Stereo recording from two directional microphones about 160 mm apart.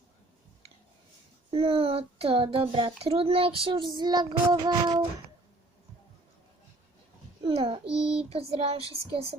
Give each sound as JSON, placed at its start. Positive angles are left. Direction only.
{"t": 1.5, "sound": "speech", "side_deg": -35}
{"t": 3.9, "sound": "child singing", "side_deg": -25}
{"t": 7.4, "sound": "speech", "side_deg": -35}
{"t": 7.9, "sound": "child singing", "side_deg": -5}
{"t": 8.3, "sound": "speech", "side_deg": -35}